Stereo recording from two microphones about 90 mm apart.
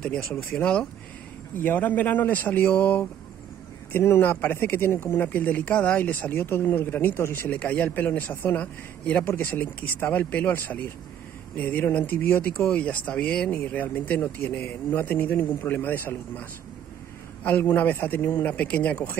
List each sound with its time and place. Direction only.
0.0 s speech: 10° left (ahead or behind)